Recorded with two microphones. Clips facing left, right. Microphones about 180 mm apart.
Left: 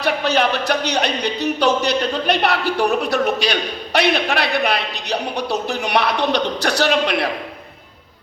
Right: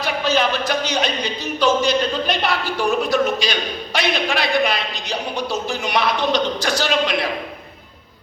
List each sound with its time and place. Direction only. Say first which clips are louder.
0.0 s speech: left 2 dB; 65° left (ahead or behind)